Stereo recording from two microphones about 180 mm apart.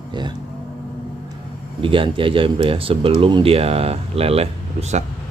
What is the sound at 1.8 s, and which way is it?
Speech, 30° right (ahead or behind).